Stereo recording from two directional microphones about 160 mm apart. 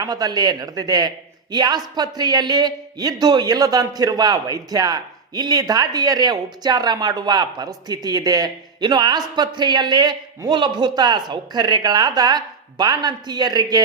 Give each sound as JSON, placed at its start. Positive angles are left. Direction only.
{"t": 0.0, "sound": "a man's voice", "side_deg": -25}